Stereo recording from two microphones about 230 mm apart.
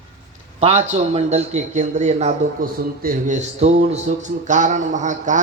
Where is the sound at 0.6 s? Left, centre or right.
Right.